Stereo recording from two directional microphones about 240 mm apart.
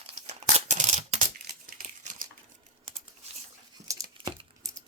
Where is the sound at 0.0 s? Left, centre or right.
Right.